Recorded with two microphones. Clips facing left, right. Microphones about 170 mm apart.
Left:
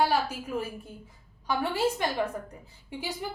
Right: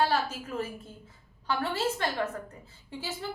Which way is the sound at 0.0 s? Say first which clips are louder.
Left 1 dB; 10° left (ahead or behind).